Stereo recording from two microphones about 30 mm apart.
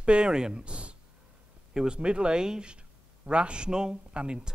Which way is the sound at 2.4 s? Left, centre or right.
Right.